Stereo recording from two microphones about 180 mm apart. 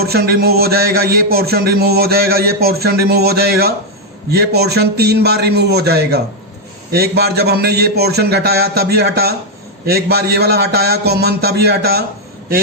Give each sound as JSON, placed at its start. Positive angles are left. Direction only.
{"t": 0.0, "sound": "a man's voice", "side_deg": -60}